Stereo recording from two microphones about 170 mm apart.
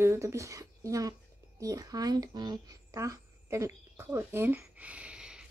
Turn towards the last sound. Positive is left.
turn(degrees=-5)  # may be behind; listen again after turning